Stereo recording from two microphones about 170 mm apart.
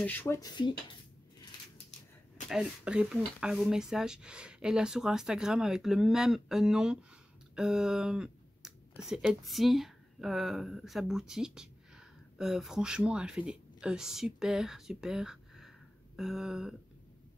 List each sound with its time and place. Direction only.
0.0 s speech: 10° left (ahead or behind)
0.4 s speech: 25° left (ahead or behind)
2.5 s speech: 5° right (ahead or behind)
7.5 s a sound: 5° right (ahead or behind)
9.0 s speech: 5° right (ahead or behind)